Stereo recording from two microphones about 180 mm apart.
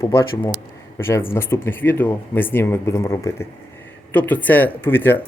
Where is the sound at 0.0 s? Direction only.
15° left (ahead or behind).